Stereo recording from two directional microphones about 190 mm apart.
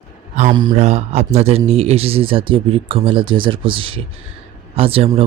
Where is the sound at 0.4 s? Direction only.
35° right (ahead or behind).